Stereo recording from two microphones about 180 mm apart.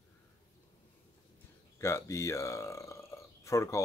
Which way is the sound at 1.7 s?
15° left (ahead or behind).